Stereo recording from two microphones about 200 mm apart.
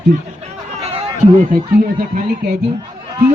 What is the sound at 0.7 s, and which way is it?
A man's voice, 30° right (ahead or behind).